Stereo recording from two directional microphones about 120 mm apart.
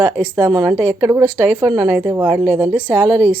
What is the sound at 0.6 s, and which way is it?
A woman's voice, 20° right (ahead or behind).